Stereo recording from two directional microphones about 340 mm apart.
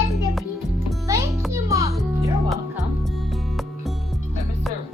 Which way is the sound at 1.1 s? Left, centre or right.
Centre.